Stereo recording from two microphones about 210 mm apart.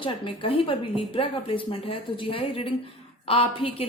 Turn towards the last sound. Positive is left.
turn(degrees=25)  # may be behind; listen again after turning